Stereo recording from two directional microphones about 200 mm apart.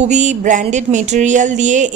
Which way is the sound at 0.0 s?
35° right (ahead or behind).